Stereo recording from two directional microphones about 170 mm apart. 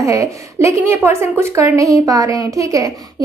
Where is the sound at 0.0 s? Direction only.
20° right (ahead or behind).